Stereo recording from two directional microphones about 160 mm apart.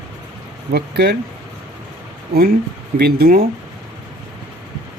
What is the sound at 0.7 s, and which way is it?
Speech, 90° right.